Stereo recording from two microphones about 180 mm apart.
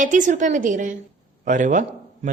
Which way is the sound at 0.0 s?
45° right (ahead or behind).